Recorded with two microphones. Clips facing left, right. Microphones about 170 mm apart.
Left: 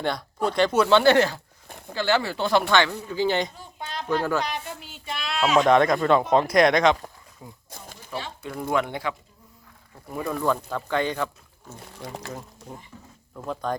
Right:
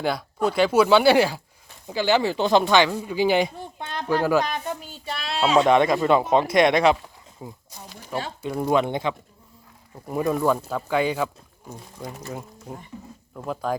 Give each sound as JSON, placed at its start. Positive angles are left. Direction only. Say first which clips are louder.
{"t": 0.0, "sound": "speech", "louder": "right 2 dB", "side_deg": -5}
{"t": 4.4, "sound": "child singing", "louder": "right 3 dB", "side_deg": -40}
{"t": 5.6, "sound": "speech", "louder": "even", "side_deg": -5}
{"t": 7.7, "sound": "a sound", "louder": "right 1 dB", "side_deg": 50}
{"t": 8.4, "sound": "speech", "louder": "right 4 dB", "side_deg": -25}
{"t": 12.9, "sound": "speech", "louder": "right 7 dB", "side_deg": -15}
{"t": 13.3, "sound": "speech", "louder": "right 2 dB", "side_deg": -5}